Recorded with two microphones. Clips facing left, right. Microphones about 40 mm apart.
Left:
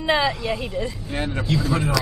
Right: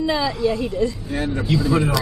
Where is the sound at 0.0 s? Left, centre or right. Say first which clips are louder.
Left 1 dB; left.